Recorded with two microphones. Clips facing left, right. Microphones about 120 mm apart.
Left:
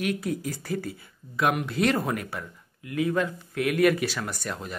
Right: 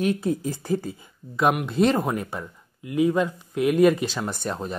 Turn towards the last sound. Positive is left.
turn(degrees=-30)  # may be behind; listen again after turning